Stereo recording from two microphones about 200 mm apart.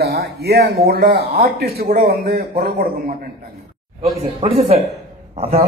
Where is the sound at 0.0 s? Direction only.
50° right (ahead or behind).